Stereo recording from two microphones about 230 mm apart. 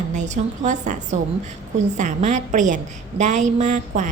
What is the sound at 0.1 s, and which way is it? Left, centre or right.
A woman's voice, right.